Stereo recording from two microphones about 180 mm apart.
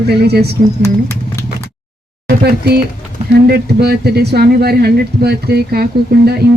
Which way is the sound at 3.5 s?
60° right (ahead or behind).